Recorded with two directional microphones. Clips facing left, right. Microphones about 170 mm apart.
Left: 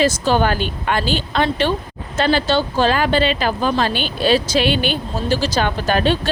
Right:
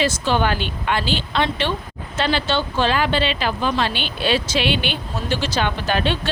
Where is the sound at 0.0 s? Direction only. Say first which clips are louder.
Left 3 dB; 40° left (ahead or behind).